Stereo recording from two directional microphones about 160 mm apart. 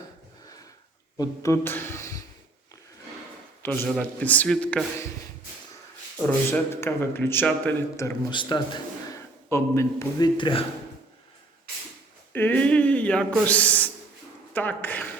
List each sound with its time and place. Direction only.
1.2 s speech: 20° left (ahead or behind)
3.6 s a man's voice: 10° left (ahead or behind)
6.2 s a man's voice: 15° left (ahead or behind)
8.3 s a man's voice: 30° left (ahead or behind)
9.5 s a man's voice: 15° left (ahead or behind)
10.3 s speech: 30° left (ahead or behind)
12.3 s a sound: 10° left (ahead or behind)
13.5 s a man's voice: 10° left (ahead or behind)